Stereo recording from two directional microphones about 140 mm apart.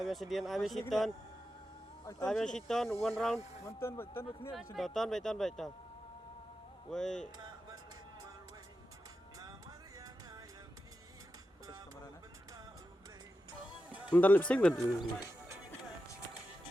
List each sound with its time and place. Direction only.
0.0 s a man's voice: centre (ahead or behind)
2.2 s a man's voice: 5° left (ahead or behind)
3.7 s speech: 15° left (ahead or behind)
4.5 s a man's voice: centre (ahead or behind)
6.9 s a man's voice: 5° left (ahead or behind)
7.3 s music: 30° right (ahead or behind)
9.4 s music: 25° right (ahead or behind)
14.1 s speech: 10° left (ahead or behind)
15.2 s music: 15° right (ahead or behind)